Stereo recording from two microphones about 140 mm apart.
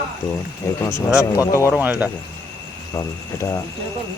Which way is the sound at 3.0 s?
20° left (ahead or behind).